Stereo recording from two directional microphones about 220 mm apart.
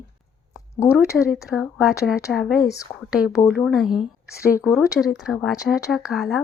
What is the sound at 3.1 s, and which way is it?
A woman's voice, 5° right (ahead or behind).